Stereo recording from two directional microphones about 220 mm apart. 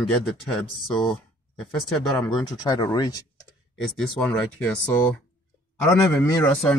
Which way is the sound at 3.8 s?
Centre (ahead or behind).